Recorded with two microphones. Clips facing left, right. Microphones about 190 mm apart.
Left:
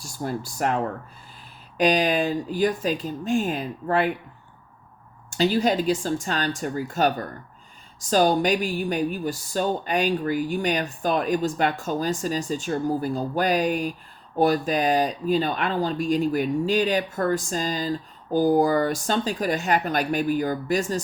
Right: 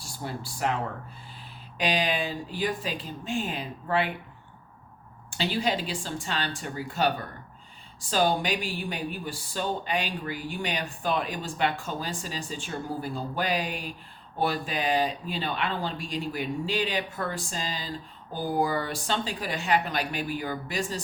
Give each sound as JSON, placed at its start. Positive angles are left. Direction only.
{"t": 0.0, "sound": "speech", "side_deg": 45}
{"t": 1.8, "sound": "a woman's voice", "side_deg": 45}
{"t": 5.3, "sound": "a woman's voice", "side_deg": 45}